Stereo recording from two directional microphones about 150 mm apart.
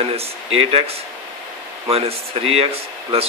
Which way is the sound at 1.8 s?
40° right (ahead or behind).